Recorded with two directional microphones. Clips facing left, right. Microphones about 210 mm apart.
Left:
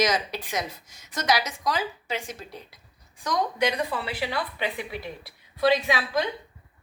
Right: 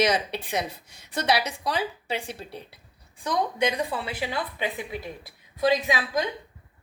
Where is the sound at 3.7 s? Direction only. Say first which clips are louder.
Even; 20° right (ahead or behind).